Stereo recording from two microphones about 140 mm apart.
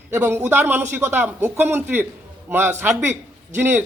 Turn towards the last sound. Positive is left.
turn(degrees=-15)  # may be behind; listen again after turning